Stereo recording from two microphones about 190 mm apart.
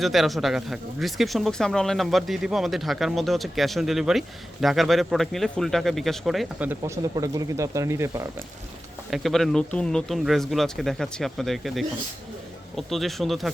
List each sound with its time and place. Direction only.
0.0 s speech: centre (ahead or behind)
6.7 s speech: 15° right (ahead or behind)
9.0 s speech: centre (ahead or behind)